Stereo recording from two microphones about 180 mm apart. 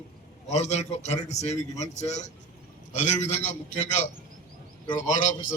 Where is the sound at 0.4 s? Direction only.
40° left (ahead or behind).